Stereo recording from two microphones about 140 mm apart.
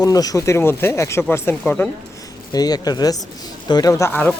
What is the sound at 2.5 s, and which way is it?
Speech, 30° left (ahead or behind).